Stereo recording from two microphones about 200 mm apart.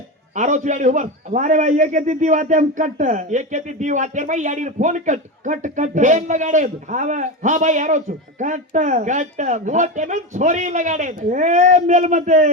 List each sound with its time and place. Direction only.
0.3 s a man's voice: 40° right (ahead or behind)